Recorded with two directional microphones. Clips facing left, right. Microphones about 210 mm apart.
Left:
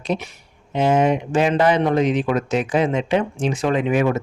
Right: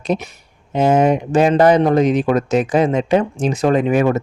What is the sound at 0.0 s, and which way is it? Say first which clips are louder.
Speech: right 4 dB; 40° right (ahead or behind).